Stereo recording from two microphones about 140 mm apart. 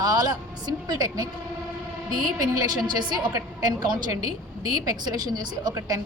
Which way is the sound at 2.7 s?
30° right (ahead or behind).